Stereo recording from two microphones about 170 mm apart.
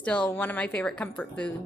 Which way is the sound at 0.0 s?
5° left (ahead or behind).